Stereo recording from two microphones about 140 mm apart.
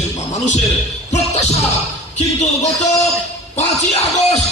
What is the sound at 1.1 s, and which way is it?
Speech, 50° left (ahead or behind).